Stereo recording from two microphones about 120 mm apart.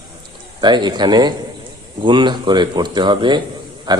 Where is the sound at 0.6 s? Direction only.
40° right (ahead or behind).